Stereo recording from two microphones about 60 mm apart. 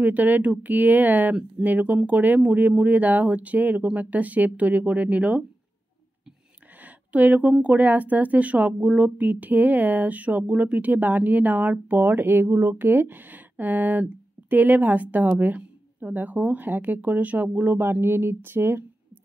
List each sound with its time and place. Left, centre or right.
0.0 s speech: right
6.8 s speech: right